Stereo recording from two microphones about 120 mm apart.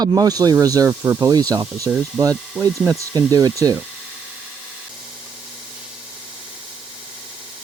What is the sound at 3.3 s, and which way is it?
Speech, 30° right (ahead or behind).